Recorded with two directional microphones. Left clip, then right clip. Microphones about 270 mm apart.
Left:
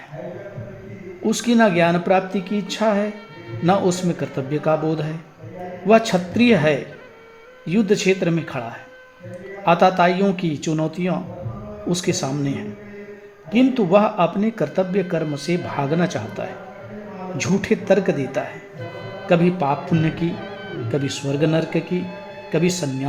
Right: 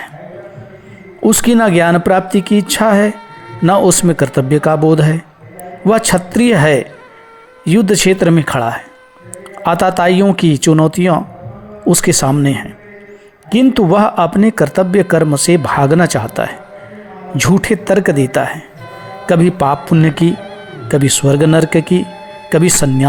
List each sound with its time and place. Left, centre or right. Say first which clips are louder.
1.2 s speech: right 7 dB; right
20.3 s music: right 5 dB; centre
20.9 s speech: right 12 dB; right